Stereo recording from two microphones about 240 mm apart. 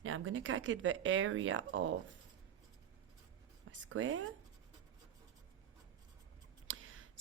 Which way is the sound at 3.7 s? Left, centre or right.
Right.